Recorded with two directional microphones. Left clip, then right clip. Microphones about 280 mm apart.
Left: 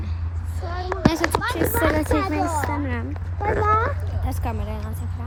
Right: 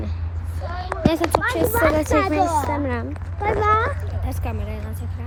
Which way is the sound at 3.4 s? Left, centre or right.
Right.